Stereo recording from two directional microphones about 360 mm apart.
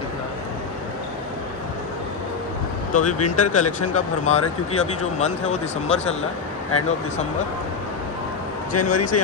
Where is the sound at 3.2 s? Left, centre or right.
Left.